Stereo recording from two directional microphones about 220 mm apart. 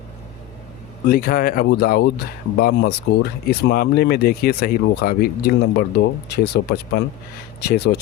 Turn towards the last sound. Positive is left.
turn(degrees=45)  # may be behind; listen again after turning